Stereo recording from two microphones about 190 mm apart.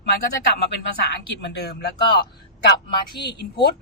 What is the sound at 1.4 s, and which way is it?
Speech, 60° left (ahead or behind).